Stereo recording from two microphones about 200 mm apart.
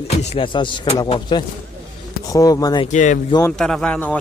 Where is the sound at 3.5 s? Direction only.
Centre (ahead or behind).